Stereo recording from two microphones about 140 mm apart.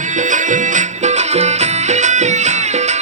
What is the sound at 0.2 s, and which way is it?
Music, 65° right (ahead or behind).